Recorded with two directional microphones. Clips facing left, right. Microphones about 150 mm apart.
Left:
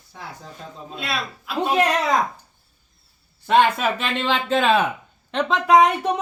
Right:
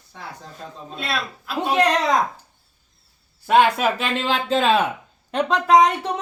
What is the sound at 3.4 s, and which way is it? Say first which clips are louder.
Speech: right 1 dB; 10° right (ahead or behind).